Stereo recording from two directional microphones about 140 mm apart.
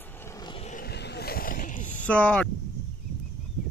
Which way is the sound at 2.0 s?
10° left (ahead or behind).